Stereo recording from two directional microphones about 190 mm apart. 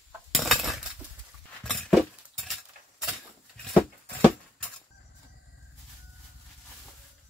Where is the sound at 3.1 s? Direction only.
5° left (ahead or behind).